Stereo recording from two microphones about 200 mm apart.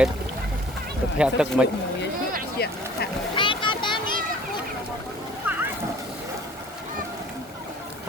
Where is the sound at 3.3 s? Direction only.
25° left (ahead or behind).